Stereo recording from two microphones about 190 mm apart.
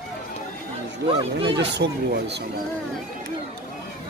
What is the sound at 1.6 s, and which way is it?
Speech, 65° right (ahead or behind).